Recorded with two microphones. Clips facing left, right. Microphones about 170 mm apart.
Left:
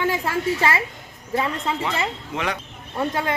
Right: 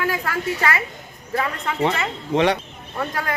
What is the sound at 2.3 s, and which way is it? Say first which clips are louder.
Speech: right 10 dB; 35° right (ahead or behind).